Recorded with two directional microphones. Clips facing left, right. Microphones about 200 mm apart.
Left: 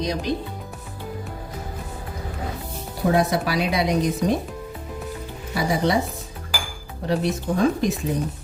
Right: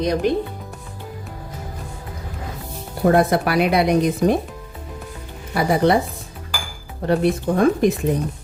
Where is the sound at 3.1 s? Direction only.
60° right (ahead or behind).